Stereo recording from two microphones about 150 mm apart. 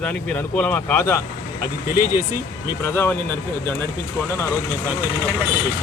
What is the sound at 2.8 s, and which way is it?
Speech, 15° left (ahead or behind).